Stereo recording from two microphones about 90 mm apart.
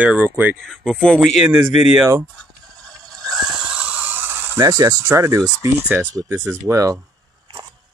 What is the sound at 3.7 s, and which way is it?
Mechanisms, 15° right (ahead or behind).